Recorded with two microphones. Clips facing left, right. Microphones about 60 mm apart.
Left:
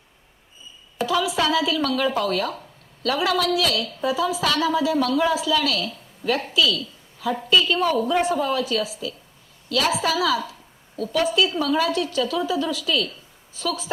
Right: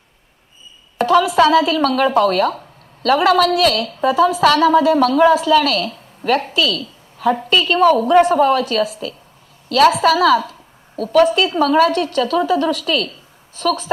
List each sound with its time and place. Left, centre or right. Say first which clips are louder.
0.9 s a woman's voice: right 9 dB; right